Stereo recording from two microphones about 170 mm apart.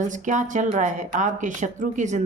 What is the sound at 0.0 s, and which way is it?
A woman's voice, 50° right (ahead or behind).